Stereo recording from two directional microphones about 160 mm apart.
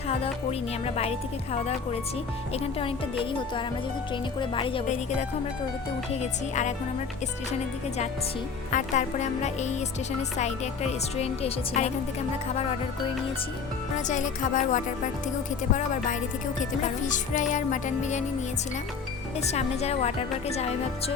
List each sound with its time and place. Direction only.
0.9 s speech: 40° left (ahead or behind)
4.1 s speech: 30° left (ahead or behind)
6.1 s speech: 45° left (ahead or behind)
8.7 s speech: 50° left (ahead or behind)
14.1 s speech: 50° left (ahead or behind)
16.8 s speech: 50° left (ahead or behind)
19.5 s speech: 40° left (ahead or behind)